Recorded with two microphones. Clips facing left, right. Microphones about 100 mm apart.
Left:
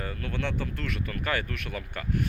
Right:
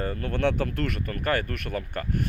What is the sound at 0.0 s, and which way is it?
Speech, 40° right (ahead or behind).